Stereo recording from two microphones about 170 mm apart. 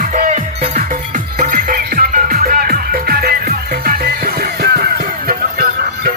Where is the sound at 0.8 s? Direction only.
50° right (ahead or behind).